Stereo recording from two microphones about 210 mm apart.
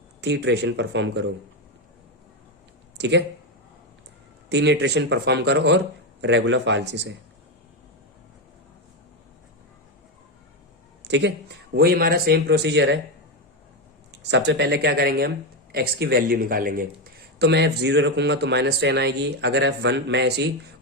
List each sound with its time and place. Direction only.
0.2 s speech: 55° right (ahead or behind)
3.0 s speech: 55° right (ahead or behind)
4.4 s speech: 55° right (ahead or behind)
11.0 s a sound: 55° right (ahead or behind)
11.7 s speech: 45° right (ahead or behind)
14.3 s speech: 55° right (ahead or behind)